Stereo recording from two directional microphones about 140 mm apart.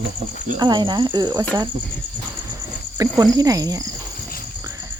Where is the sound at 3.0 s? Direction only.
25° right (ahead or behind).